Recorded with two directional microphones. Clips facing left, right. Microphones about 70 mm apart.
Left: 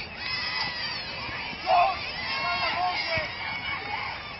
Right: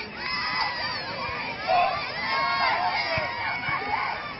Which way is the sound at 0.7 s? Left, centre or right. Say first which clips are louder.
Right 5 dB; right.